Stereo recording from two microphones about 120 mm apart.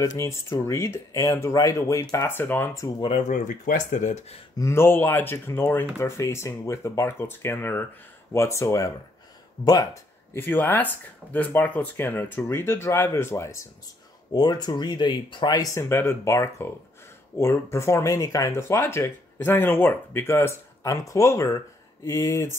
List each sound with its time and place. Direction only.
0.0 s speech: 25° left (ahead or behind)
3.2 s speech: 90° left
4.6 s speech: 20° left (ahead or behind)
10.3 s speech: 15° left (ahead or behind)
14.3 s speech: 35° left (ahead or behind)